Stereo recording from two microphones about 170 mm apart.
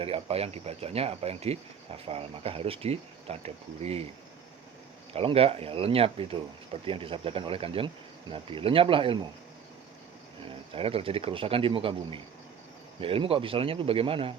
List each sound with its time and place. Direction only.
0.0 s speech: 35° right (ahead or behind)
5.1 s speech: 35° right (ahead or behind)
10.7 s speech: 35° right (ahead or behind)